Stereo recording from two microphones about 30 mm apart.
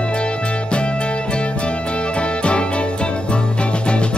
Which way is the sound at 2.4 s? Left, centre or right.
Left.